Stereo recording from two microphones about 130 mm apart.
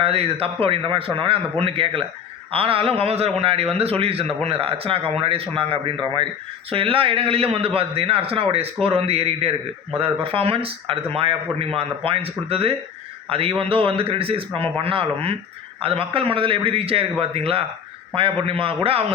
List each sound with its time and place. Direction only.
0.0 s a man's voice: 50° right (ahead or behind)